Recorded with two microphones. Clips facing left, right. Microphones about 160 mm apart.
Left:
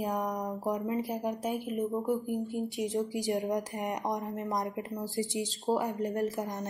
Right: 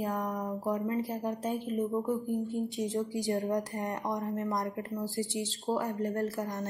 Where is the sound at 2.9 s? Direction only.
15° left (ahead or behind).